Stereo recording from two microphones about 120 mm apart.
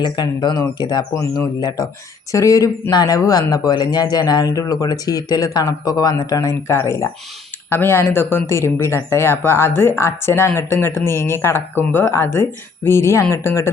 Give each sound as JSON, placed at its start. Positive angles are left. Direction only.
{"t": 0.0, "sound": "speech", "side_deg": 40}